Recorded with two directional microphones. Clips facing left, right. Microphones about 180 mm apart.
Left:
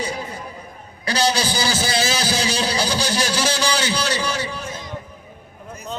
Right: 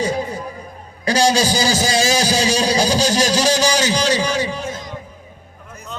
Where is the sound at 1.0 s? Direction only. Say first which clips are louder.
Right 5 dB; 45° right (ahead or behind).